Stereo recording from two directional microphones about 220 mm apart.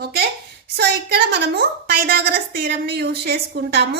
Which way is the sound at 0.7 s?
45° right (ahead or behind).